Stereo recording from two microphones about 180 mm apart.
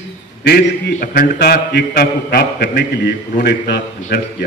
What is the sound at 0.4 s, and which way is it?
Speech, 65° left (ahead or behind).